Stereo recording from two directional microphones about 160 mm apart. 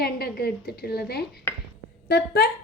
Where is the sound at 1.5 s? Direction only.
15° left (ahead or behind).